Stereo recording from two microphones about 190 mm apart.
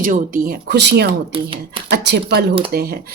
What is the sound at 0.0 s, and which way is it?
Speech, 45° right (ahead or behind).